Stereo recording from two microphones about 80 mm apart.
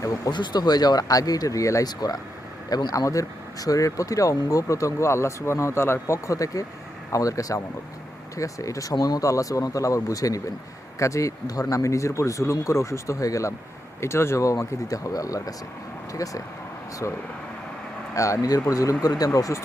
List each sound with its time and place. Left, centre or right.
0.3 s speech: left
1.9 s speech: left
18.1 s speech: left